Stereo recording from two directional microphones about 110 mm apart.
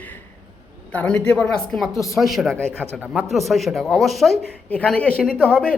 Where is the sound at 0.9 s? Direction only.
10° left (ahead or behind).